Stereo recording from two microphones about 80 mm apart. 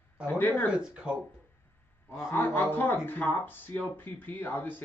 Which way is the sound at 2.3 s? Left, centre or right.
Left.